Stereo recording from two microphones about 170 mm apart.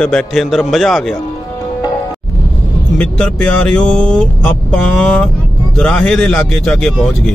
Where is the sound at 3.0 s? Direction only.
5° left (ahead or behind).